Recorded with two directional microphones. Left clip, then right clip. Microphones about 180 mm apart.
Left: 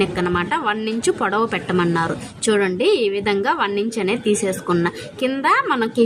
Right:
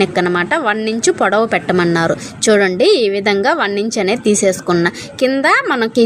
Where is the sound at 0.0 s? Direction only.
25° right (ahead or behind).